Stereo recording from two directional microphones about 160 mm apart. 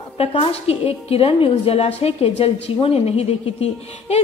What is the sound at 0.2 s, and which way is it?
A woman's voice, 40° left (ahead or behind).